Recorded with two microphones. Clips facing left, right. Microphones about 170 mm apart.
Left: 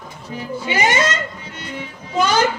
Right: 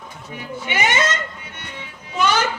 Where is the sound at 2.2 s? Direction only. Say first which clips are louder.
Left 2 dB; 40° left (ahead or behind).